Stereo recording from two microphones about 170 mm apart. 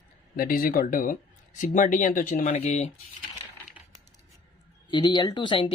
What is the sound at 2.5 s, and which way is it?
Speech, 40° left (ahead or behind).